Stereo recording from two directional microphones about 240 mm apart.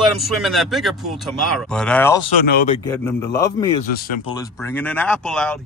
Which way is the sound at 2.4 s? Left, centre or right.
Left.